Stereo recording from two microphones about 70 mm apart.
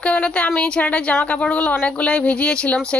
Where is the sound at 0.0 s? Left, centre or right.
Centre.